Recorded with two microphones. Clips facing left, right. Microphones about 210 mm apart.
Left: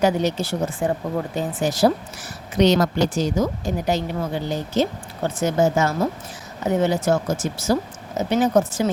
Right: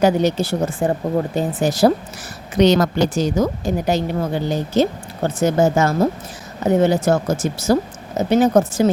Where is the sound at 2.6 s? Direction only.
85° right.